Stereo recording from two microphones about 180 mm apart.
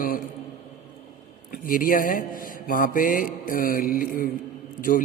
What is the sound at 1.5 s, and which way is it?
Speech, 50° left (ahead or behind).